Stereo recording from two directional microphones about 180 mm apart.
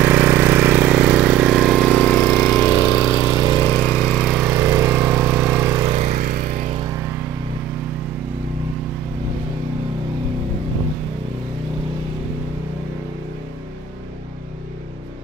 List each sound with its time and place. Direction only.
0.0 s vehicle: 15° right (ahead or behind); by 2.7 s 5° left (ahead or behind)
2.7 s lawn mower: 20° left (ahead or behind)
3.6 s lawn mower: 5° left (ahead or behind)
4.5 s lawn mower: 15° right (ahead or behind)
5.9 s a sound: 40° right (ahead or behind)